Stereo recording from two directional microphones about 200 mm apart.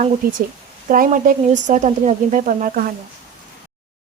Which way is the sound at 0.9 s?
40° right (ahead or behind).